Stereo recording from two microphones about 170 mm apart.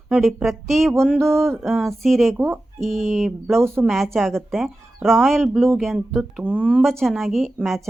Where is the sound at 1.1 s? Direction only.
15° right (ahead or behind).